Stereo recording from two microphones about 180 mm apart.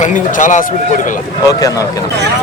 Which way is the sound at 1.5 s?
20° left (ahead or behind).